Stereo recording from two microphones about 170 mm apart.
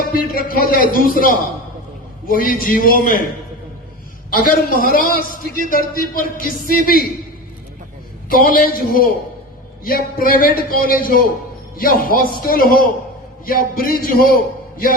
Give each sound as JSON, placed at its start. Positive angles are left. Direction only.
{"t": 0.0, "sound": "a man's voice", "side_deg": 60}
{"t": 4.3, "sound": "a man's voice", "side_deg": 55}
{"t": 8.3, "sound": "a man's voice", "side_deg": 55}